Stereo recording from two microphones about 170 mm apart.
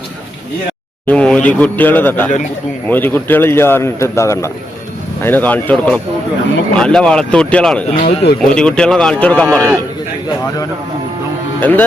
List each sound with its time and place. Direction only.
1.0 s a man's voice: 5° left (ahead or behind)
7.9 s speech: 35° left (ahead or behind)
8.4 s a man's voice: 5° left (ahead or behind)
11.6 s a man's voice: 10° left (ahead or behind)